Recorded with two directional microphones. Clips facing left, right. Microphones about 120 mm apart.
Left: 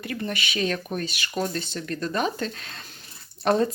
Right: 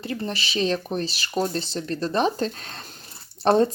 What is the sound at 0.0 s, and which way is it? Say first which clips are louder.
A woman's voice: right 1 dB; 30° right (ahead or behind).